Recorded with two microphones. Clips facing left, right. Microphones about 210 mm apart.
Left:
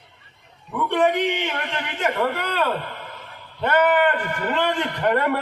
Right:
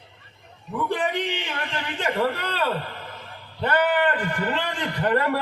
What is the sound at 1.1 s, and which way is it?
A man's voice, 30° right (ahead or behind).